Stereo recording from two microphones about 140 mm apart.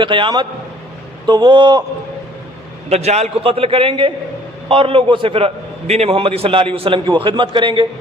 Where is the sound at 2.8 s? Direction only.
50° right (ahead or behind).